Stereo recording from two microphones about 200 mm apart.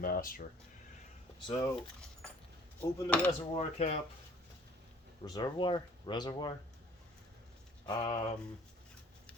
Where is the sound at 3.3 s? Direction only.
30° left (ahead or behind).